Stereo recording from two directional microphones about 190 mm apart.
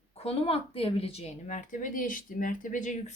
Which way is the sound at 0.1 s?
30° left (ahead or behind).